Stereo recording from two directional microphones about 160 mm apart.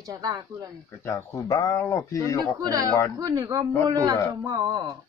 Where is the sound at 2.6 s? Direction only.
25° right (ahead or behind).